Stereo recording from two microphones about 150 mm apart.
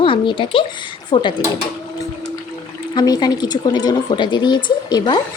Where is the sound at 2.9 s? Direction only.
25° left (ahead or behind).